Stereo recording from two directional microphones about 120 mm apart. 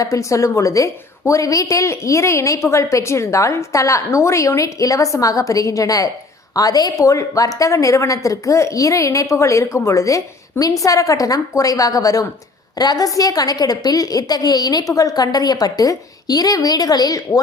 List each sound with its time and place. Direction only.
0.0 s a woman's voice: 25° left (ahead or behind)